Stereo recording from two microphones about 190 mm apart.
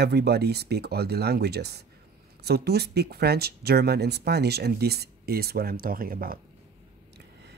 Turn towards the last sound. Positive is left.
turn(degrees=-50)  # may be behind; listen again after turning